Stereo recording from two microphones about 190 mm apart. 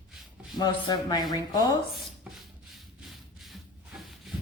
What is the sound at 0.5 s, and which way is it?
A woman's voice, 20° left (ahead or behind).